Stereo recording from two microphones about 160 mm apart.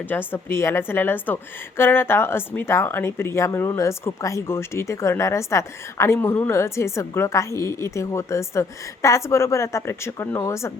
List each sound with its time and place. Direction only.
0.1 s speech: 15° left (ahead or behind)